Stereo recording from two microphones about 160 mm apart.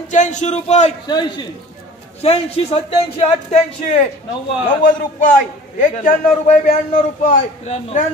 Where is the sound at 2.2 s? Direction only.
40° left (ahead or behind).